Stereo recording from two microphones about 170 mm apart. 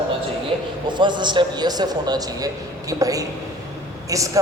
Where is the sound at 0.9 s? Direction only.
25° right (ahead or behind).